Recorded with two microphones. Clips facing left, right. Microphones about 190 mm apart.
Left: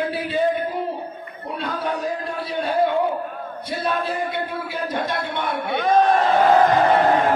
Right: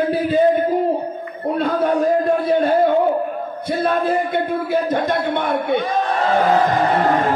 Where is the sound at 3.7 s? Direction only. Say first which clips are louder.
Right 6 dB; 50° right (ahead or behind).